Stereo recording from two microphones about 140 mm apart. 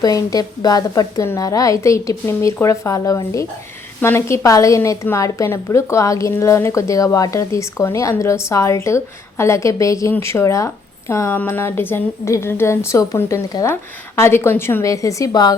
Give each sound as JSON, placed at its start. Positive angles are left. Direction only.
{"t": 0.0, "sound": "a woman's voice", "side_deg": 25}